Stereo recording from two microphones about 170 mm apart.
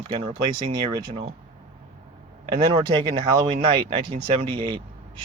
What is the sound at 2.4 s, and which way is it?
Speech, 30° right (ahead or behind).